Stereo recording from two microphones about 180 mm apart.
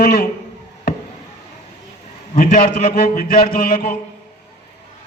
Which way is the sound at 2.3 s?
55° left (ahead or behind).